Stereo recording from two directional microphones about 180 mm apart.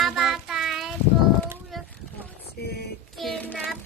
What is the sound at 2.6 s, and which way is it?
Music, 60° left (ahead or behind).